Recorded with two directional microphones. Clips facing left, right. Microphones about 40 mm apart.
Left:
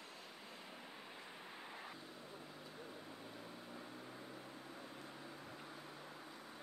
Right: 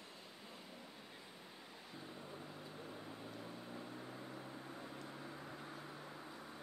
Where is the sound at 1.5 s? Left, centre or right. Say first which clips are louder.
Left 4 dB; left.